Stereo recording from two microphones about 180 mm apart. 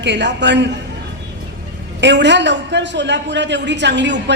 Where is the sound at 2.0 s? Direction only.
80° right.